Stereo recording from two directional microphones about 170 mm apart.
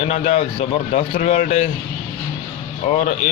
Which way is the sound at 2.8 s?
45° left (ahead or behind).